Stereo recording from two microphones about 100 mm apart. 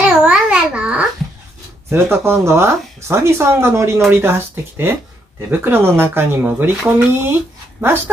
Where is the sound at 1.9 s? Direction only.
25° right (ahead or behind).